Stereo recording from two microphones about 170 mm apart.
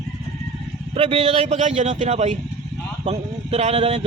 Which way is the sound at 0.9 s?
35° right (ahead or behind).